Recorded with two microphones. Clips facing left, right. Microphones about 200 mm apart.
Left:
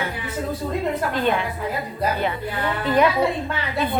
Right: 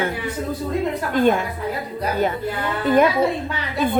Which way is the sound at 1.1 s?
45° right (ahead or behind).